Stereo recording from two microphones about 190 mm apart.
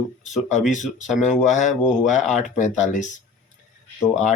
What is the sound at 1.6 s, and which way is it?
Speech, 40° left (ahead or behind).